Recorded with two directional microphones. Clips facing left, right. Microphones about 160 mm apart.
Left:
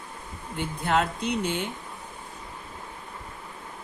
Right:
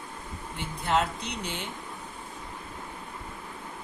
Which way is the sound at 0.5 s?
50° left (ahead or behind).